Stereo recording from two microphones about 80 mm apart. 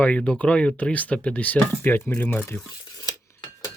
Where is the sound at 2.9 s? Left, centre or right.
Left.